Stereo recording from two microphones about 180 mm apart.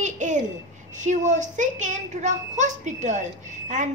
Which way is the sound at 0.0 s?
45° right (ahead or behind).